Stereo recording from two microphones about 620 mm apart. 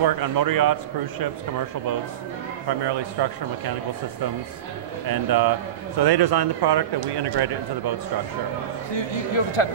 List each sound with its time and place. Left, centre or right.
0.0 s speech: right
2.8 s speech: right
5.0 s speech: right
8.9 s a man's voice: left